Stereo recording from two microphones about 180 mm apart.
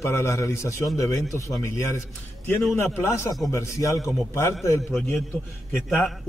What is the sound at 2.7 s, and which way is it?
A man's voice, 15° left (ahead or behind).